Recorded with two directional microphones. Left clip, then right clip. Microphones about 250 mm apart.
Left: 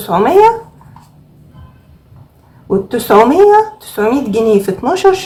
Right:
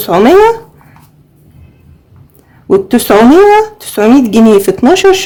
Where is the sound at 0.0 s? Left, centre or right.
Right.